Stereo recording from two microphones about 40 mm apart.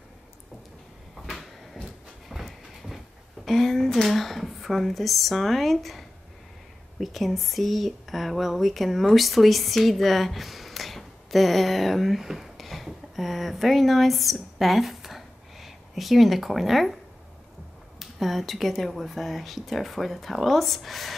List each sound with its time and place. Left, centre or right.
1.2 s cupboard open or close: centre
2.2 s train: centre
3.4 s speech: centre
17.9 s speech: centre